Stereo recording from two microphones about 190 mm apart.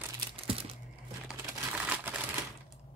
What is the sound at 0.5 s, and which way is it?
Crumpling, 30° right (ahead or behind).